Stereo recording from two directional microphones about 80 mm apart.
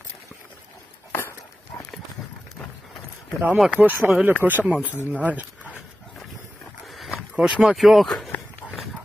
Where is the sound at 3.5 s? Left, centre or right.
Centre.